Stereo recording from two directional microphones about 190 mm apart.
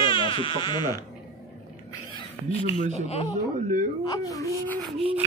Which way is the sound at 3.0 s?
35° left (ahead or behind).